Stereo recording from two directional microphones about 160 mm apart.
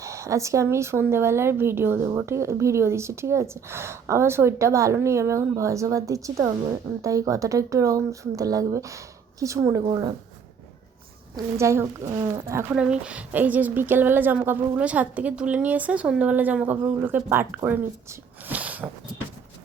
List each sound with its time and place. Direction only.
0.0 s speech: 20° right (ahead or behind)
11.3 s a woman's voice: 15° right (ahead or behind)
12.7 s a woman's voice: 5° right (ahead or behind)